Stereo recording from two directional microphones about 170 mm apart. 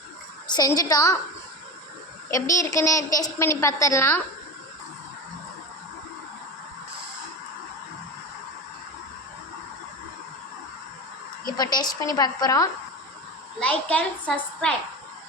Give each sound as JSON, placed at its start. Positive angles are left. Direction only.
{"t": 0.4, "sound": "a woman's voice", "side_deg": 25}
{"t": 2.3, "sound": "a woman's voice", "side_deg": 20}
{"t": 11.5, "sound": "a woman's voice", "side_deg": 25}
{"t": 13.6, "sound": "a woman's voice", "side_deg": 10}